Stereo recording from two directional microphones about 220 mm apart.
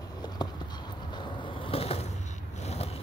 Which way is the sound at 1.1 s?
20° left (ahead or behind).